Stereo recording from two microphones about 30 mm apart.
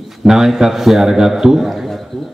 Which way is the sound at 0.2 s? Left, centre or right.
Centre.